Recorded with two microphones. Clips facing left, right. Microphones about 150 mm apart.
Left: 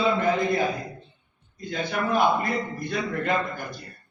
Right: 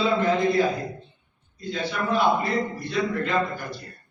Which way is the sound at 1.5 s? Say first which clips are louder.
Even; 50° left (ahead or behind).